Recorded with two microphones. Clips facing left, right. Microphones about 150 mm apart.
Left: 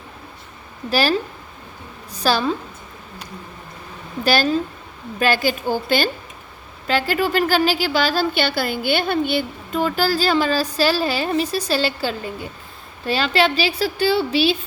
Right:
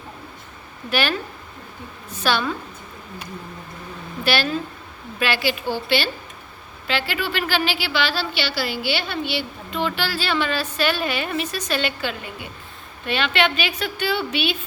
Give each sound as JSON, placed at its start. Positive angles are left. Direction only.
{"t": 0.9, "sound": "a woman's voice", "side_deg": 35}
{"t": 2.1, "sound": "a woman's voice", "side_deg": 35}
{"t": 4.2, "sound": "a woman's voice", "side_deg": 40}